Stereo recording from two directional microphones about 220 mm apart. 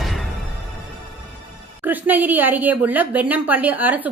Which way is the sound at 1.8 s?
10° right (ahead or behind).